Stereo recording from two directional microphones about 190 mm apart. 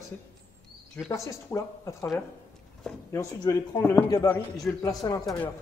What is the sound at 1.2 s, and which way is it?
Speech, 15° left (ahead or behind).